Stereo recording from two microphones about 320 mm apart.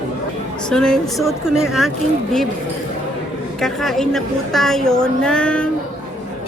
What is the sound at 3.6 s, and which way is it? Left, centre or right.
A woman's voice, centre.